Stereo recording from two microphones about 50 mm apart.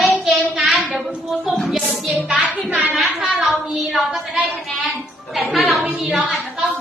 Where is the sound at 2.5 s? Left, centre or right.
Right.